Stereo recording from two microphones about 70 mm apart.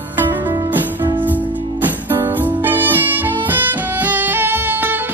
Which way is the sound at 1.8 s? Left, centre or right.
Right.